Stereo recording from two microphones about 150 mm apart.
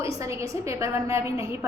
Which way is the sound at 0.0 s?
20° right (ahead or behind).